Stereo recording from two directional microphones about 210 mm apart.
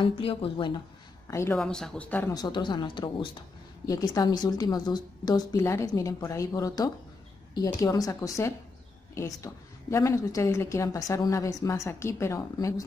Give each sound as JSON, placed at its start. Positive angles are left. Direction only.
{"t": 0.0, "sound": "speech", "side_deg": 25}
{"t": 1.2, "sound": "a woman's voice", "side_deg": 15}
{"t": 1.6, "sound": "speech", "side_deg": 5}
{"t": 2.3, "sound": "a woman's voice", "side_deg": 20}